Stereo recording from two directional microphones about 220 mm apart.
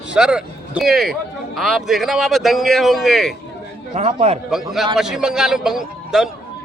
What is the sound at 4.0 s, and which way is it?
Speech, 30° right (ahead or behind).